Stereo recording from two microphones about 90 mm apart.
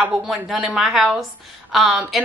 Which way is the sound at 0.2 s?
5° right (ahead or behind).